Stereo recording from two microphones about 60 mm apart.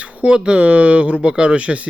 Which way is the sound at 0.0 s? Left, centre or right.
Right.